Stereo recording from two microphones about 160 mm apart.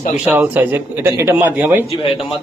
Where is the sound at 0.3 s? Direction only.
10° right (ahead or behind).